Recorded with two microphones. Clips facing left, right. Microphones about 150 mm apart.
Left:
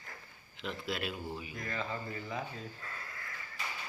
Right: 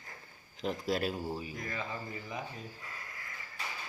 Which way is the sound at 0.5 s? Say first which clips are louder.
Right 5 dB; 40° right (ahead or behind).